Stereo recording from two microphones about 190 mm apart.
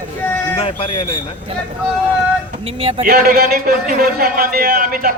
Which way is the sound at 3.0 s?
50° right (ahead or behind).